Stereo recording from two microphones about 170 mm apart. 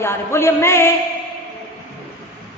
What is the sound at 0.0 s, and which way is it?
Speech, 15° left (ahead or behind).